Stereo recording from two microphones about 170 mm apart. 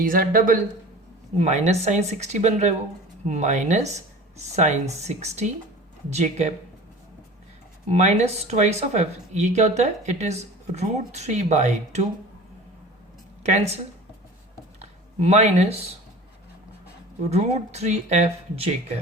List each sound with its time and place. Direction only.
0.0 s speech: 55° right (ahead or behind)
1.4 s speech: 40° right (ahead or behind)
7.9 s speech: 40° right (ahead or behind)
13.4 s speech: 40° right (ahead or behind)
14.8 s speech: 40° right (ahead or behind)
17.2 s speech: 40° right (ahead or behind)